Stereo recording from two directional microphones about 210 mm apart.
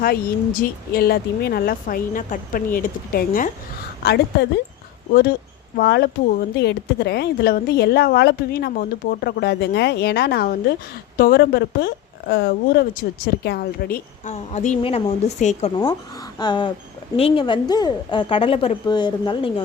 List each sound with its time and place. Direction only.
0.0 s speech: 45° left (ahead or behind)
5.7 s a woman's voice: 50° left (ahead or behind); by 19.6 s 20° left (ahead or behind)